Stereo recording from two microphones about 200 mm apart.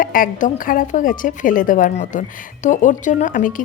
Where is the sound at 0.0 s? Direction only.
45° left (ahead or behind).